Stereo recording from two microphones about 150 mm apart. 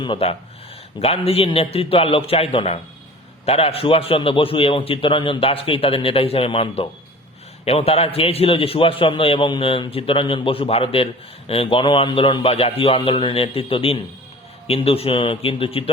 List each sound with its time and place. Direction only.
0.0 s a man's voice: 35° left (ahead or behind)